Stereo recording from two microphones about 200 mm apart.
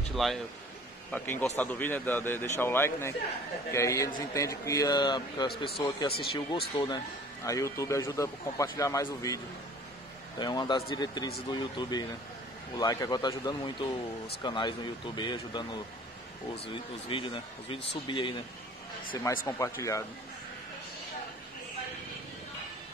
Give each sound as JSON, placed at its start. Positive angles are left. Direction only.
{"t": 0.1, "sound": "a man's voice", "side_deg": 0}
{"t": 10.4, "sound": "speech", "side_deg": 20}
{"t": 16.6, "sound": "a man's voice", "side_deg": 25}